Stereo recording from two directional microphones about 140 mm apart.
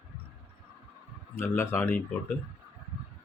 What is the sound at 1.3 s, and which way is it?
Speech, 15° left (ahead or behind).